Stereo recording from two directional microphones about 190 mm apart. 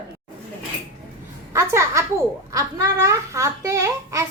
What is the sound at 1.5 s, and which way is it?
A child's voice, 15° right (ahead or behind).